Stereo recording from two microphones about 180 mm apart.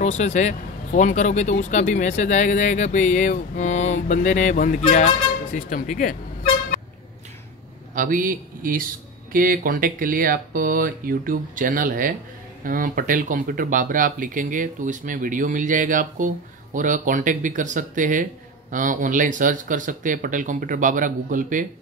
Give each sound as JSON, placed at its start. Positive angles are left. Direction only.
{"t": 0.0, "sound": "speech", "side_deg": 40}
{"t": 7.9, "sound": "a man's voice", "side_deg": -50}